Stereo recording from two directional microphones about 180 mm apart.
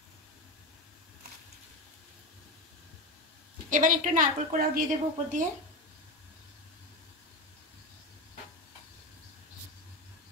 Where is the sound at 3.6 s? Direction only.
45° right (ahead or behind).